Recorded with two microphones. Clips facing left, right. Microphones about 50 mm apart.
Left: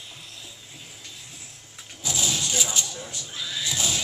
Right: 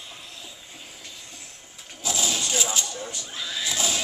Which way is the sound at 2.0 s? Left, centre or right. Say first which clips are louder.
Right 1 dB; centre.